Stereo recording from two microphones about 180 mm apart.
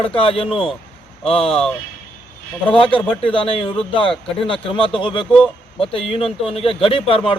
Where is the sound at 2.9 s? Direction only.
30° left (ahead or behind).